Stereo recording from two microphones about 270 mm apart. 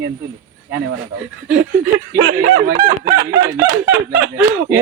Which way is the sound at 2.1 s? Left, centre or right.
Right.